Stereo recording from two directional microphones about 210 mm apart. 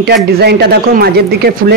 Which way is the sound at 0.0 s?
50° right (ahead or behind).